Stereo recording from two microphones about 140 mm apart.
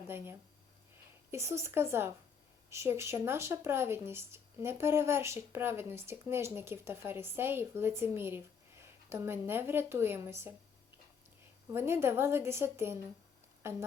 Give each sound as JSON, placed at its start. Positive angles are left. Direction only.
{"t": 1.3, "sound": "a woman's voice", "side_deg": -20}
{"t": 11.7, "sound": "speech", "side_deg": -15}